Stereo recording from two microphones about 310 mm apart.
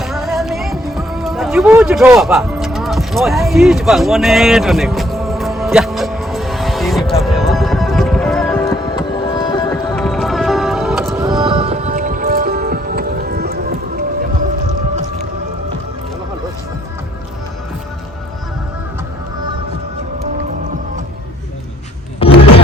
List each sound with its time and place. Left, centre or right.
0.0 s music: centre
9.9 s music: centre; by 14.0 s right
22.2 s music: centre